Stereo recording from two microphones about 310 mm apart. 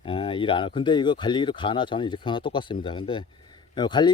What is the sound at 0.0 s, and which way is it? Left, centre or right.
Speech, centre.